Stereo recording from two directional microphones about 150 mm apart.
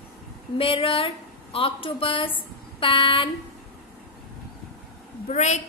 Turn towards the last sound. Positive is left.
turn(degrees=50)  # may be behind; listen again after turning